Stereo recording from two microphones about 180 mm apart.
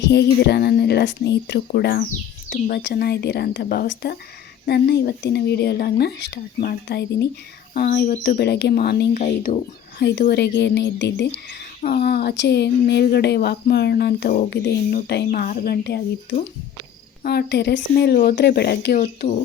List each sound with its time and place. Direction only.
0.0 s speech: 65° left (ahead or behind)
7.7 s speech: 50° left (ahead or behind)
9.1 s speech: 45° left (ahead or behind)
10.0 s speech: 65° left (ahead or behind)
11.8 s speech: 55° left (ahead or behind)
17.2 s speech: 65° left (ahead or behind)